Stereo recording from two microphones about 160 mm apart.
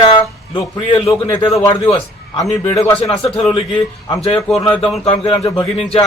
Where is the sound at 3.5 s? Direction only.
35° left (ahead or behind).